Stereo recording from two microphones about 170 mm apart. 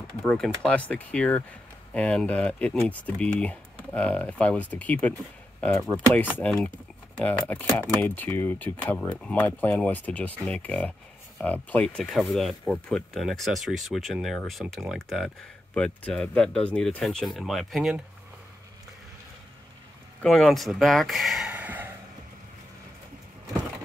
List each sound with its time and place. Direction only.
0.2 s speech: 5° left (ahead or behind)
20.2 s speech: 5° left (ahead or behind)